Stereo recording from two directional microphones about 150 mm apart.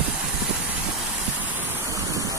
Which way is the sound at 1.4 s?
15° right (ahead or behind).